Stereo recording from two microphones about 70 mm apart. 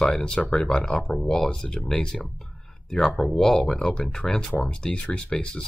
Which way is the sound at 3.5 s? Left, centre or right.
Centre.